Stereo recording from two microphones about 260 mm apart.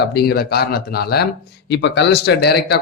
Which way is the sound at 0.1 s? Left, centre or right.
Left.